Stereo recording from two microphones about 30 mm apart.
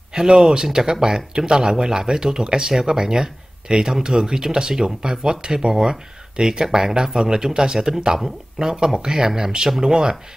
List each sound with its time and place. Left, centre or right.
0.1 s speech: right